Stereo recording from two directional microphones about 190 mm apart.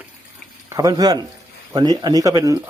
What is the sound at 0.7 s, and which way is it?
Speech, 20° right (ahead or behind).